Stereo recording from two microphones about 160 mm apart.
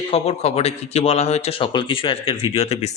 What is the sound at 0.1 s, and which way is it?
A man's voice, 40° left (ahead or behind).